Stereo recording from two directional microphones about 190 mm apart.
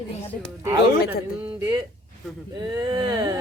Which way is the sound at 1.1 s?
15° right (ahead or behind).